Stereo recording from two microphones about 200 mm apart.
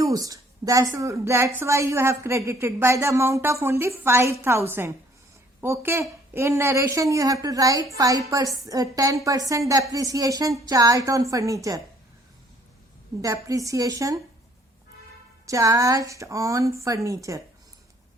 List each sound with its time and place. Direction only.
0.0 s a woman's voice: 15° right (ahead or behind)
13.2 s a woman's voice: 15° right (ahead or behind)
15.4 s a woman's voice: 15° right (ahead or behind)